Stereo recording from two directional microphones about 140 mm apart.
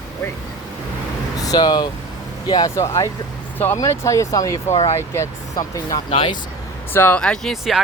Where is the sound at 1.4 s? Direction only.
30° left (ahead or behind).